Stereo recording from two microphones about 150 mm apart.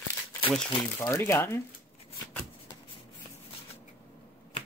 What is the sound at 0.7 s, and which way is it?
Speech, 25° left (ahead or behind).